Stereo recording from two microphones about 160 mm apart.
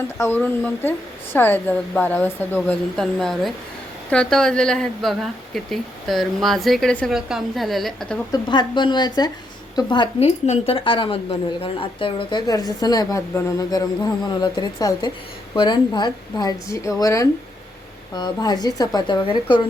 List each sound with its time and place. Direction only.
0.2 s a woman's voice: 10° left (ahead or behind)
8.3 s a woman's voice: 30° left (ahead or behind)
10.2 s a woman's voice: 45° left (ahead or behind)